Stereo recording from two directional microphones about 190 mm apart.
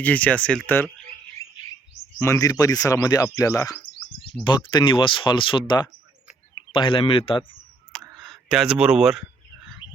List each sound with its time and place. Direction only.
0.0 s speech: 10° left (ahead or behind)
1.4 s bird: 15° left (ahead or behind)
2.1 s speech: 15° left (ahead or behind)
7.5 s a sound: 5° left (ahead or behind)